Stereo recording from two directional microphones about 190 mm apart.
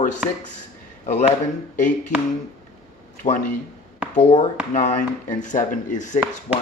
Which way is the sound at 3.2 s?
35° left (ahead or behind).